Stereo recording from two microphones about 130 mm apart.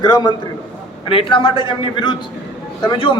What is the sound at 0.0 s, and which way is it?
Speech, 35° left (ahead or behind).